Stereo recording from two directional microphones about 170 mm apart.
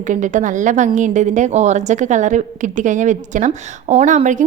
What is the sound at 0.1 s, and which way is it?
A woman's voice, 45° right (ahead or behind).